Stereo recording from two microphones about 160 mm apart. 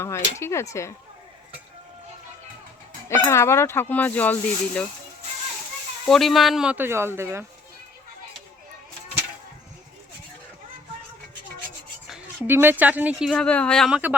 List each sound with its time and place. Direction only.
0.0 s speech: 15° left (ahead or behind)
3.1 s speech: 15° left (ahead or behind)
6.1 s speech: centre (ahead or behind); by 7.4 s 15° right (ahead or behind)
12.5 s speech: 15° right (ahead or behind)
13.3 s speech: 10° left (ahead or behind)
13.9 s speech: 10° right (ahead or behind)